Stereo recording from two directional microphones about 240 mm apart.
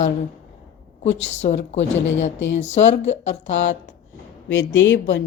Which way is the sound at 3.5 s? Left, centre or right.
Left.